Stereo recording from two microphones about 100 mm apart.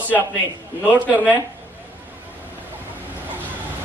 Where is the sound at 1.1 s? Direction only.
15° right (ahead or behind).